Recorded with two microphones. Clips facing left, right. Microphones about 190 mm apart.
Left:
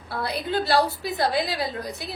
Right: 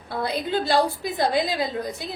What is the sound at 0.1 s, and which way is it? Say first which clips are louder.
A woman's voice: right 2 dB; 20° right (ahead or behind).